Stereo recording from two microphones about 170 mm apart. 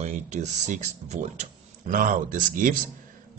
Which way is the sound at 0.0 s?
45° right (ahead or behind).